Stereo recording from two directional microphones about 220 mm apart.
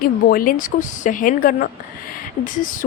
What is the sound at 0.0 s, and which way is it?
A woman's voice, 40° left (ahead or behind).